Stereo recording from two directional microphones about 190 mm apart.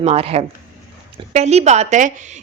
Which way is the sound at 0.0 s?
30° right (ahead or behind).